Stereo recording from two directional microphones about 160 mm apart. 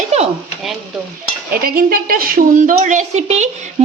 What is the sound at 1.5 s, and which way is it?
A woman's voice, 70° right (ahead or behind).